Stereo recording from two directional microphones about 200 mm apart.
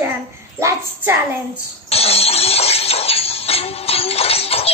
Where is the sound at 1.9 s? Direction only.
30° left (ahead or behind).